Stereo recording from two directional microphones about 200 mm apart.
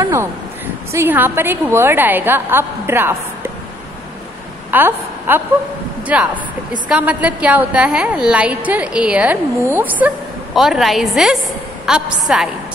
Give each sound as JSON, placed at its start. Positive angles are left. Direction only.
{"t": 0.0, "sound": "a woman's voice", "side_deg": -15}
{"t": 4.6, "sound": "a woman's voice", "side_deg": -10}